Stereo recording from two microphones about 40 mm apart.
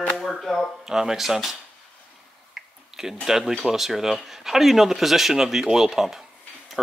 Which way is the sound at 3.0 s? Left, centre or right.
Centre.